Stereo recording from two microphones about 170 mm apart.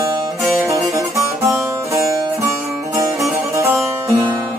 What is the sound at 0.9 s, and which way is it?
Music, 20° right (ahead or behind).